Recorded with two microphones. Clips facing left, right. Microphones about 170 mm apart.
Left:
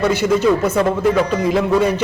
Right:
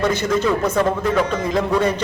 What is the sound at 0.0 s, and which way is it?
Speech, 10° left (ahead or behind).